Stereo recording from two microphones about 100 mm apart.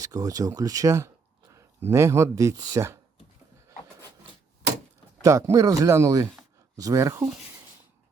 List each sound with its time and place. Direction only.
0.0 s speech: 35° right (ahead or behind)
5.2 s speech: 30° right (ahead or behind)